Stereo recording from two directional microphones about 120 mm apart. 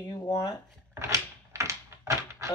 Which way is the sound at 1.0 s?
25° right (ahead or behind).